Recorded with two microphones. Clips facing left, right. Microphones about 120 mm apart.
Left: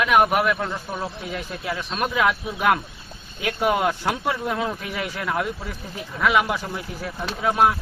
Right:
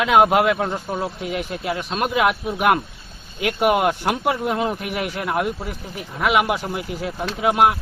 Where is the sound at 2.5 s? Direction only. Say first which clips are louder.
Right 2 dB; 15° right (ahead or behind).